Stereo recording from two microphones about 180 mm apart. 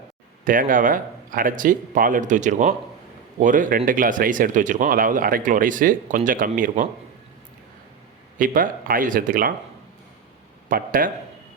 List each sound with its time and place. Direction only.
0.4 s speech: 50° right (ahead or behind)
8.4 s speech: 50° right (ahead or behind)
10.7 s speech: 50° right (ahead or behind)